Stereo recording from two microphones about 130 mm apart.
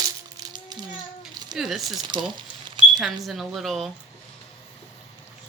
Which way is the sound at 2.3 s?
35° right (ahead or behind).